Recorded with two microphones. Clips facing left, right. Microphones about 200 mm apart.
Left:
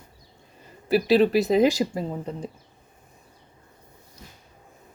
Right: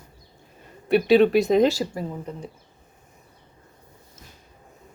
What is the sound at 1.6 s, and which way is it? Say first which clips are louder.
Speech: left 1 dB; 20° left (ahead or behind).